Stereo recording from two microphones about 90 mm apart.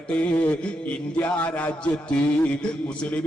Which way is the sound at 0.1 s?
15° left (ahead or behind).